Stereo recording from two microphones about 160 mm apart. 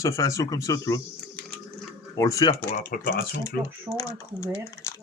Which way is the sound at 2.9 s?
60° left (ahead or behind).